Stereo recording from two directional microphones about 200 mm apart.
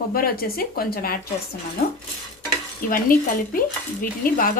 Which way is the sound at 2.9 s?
45° left (ahead or behind).